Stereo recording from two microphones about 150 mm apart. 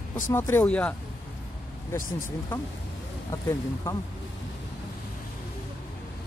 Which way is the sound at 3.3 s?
20° left (ahead or behind).